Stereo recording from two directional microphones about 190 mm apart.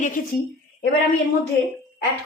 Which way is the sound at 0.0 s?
45° left (ahead or behind).